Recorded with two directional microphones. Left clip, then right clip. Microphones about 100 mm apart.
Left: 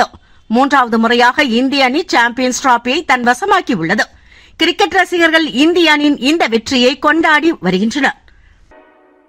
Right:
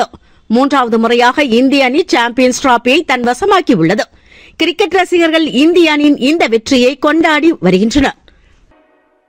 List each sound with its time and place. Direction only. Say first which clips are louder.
0.4 s a man's voice: right 1 dB; 10° right (ahead or behind)
0.7 s a woman's voice: even; 20° right (ahead or behind)
7.7 s a woman's voice: right 3 dB; 35° right (ahead or behind)